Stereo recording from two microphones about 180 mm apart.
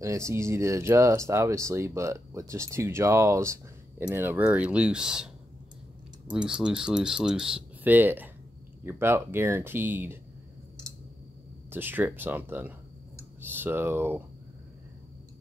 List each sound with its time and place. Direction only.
0.0 s speech: 15° right (ahead or behind)
6.3 s speech: 5° right (ahead or behind)
11.7 s speech: 10° right (ahead or behind)